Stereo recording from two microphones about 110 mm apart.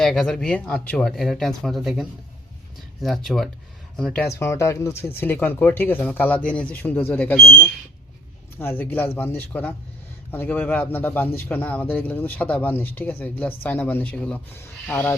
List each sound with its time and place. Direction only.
0.0 s speech: 5° left (ahead or behind)
4.3 s speech: 25° left (ahead or behind); by 7.5 s 10° left (ahead or behind)
8.5 s speech: 20° left (ahead or behind)